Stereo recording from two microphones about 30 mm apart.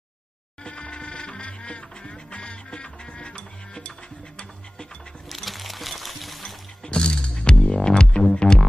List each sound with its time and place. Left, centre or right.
0.7 s music: left
5.3 s music: centre
6.8 s music: left